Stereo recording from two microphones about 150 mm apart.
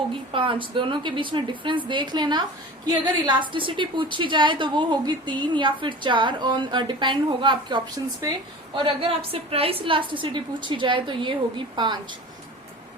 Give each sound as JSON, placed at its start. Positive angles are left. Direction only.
{"t": 0.1, "sound": "a woman's voice", "side_deg": -35}